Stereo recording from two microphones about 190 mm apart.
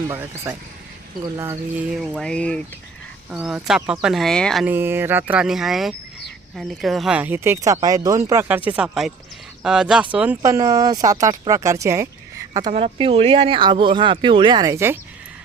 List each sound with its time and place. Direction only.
0.1 s speech: 15° right (ahead or behind); by 4.6 s 5° left (ahead or behind)
4.6 s speech: 10° right (ahead or behind)
12.7 s speech: 30° right (ahead or behind); by 14.9 s 15° right (ahead or behind)